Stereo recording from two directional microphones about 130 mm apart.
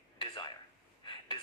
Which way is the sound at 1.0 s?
40° left (ahead or behind).